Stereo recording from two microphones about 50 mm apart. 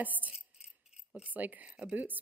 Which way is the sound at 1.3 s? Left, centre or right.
Right.